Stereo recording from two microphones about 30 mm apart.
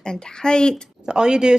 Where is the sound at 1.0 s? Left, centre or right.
Right.